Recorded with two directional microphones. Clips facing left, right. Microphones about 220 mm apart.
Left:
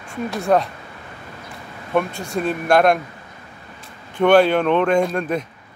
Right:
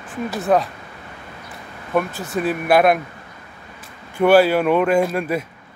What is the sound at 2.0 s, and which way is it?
Speech, 5° right (ahead or behind).